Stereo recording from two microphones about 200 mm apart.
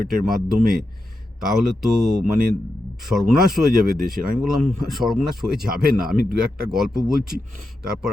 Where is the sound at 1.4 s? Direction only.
Centre (ahead or behind).